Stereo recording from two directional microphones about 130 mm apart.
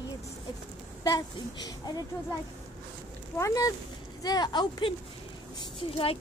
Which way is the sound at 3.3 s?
25° left (ahead or behind).